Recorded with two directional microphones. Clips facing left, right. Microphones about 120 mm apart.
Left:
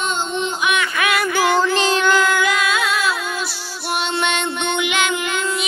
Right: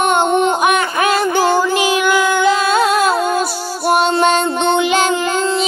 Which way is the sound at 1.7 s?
10° right (ahead or behind).